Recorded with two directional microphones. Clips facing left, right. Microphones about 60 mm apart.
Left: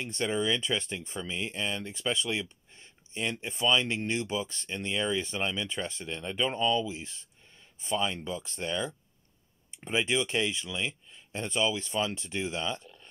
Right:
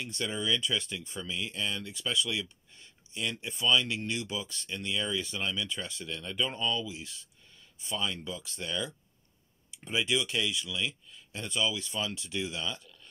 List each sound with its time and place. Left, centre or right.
0.0 s speech: left